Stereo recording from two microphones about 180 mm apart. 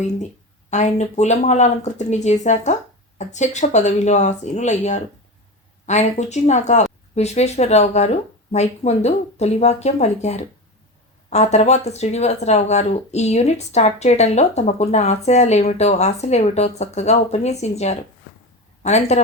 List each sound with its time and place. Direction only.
0.7 s speech: 40° left (ahead or behind)